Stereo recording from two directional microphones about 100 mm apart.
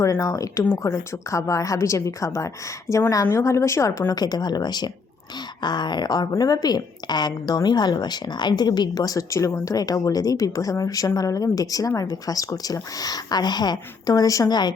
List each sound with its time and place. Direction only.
0.0 s a woman's voice: 35° left (ahead or behind)
5.6 s a sound: 45° left (ahead or behind)
6.3 s a woman's voice: 40° left (ahead or behind)